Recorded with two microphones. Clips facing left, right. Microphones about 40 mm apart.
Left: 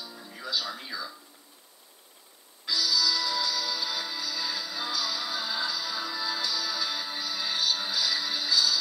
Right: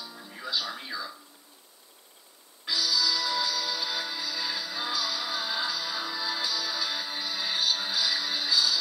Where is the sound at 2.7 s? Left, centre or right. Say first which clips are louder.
Even; right.